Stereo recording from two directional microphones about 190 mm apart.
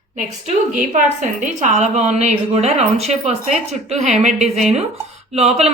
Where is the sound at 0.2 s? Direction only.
40° right (ahead or behind).